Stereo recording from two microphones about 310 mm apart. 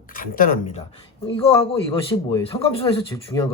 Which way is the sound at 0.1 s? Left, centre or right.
Left.